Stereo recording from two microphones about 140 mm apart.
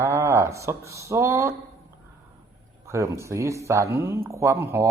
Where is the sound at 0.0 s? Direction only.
20° right (ahead or behind).